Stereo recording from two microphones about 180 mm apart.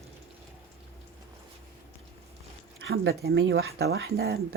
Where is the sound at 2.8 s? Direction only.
60° right (ahead or behind).